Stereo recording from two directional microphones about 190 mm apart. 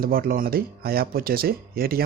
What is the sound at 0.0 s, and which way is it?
Speech, 50° right (ahead or behind).